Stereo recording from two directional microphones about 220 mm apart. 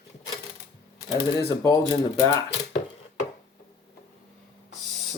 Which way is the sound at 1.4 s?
15° left (ahead or behind).